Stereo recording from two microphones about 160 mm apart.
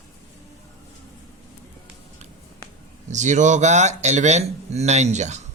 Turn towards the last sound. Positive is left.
turn(degrees=-45)  # may be behind; listen again after turning